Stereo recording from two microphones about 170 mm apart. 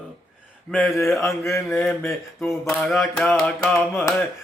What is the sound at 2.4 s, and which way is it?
Mantra, 5° left (ahead or behind).